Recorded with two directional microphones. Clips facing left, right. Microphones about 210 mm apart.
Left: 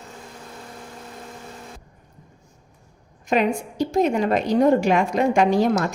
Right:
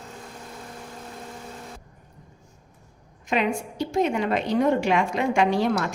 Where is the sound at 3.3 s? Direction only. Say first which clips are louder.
Left 4 dB; 40° left (ahead or behind).